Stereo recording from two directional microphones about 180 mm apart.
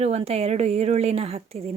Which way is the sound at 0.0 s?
35° right (ahead or behind).